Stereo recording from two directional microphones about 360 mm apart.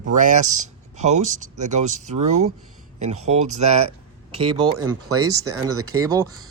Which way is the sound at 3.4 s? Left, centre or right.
Right.